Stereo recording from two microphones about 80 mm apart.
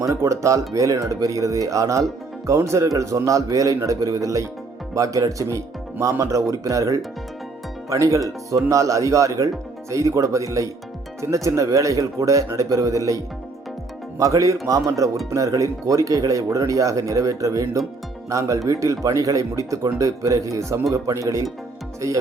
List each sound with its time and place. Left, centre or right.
0.0 s a man's voice: right